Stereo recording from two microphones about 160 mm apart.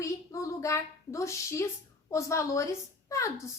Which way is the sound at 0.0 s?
20° left (ahead or behind).